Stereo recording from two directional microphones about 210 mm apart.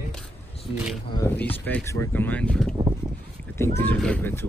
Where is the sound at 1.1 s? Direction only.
10° left (ahead or behind).